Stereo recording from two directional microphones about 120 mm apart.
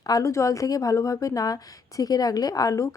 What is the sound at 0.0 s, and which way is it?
Speech, 30° left (ahead or behind).